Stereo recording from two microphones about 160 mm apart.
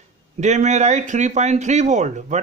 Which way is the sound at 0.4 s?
45° right (ahead or behind).